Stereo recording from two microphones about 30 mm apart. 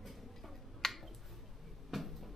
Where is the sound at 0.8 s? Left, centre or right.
Centre.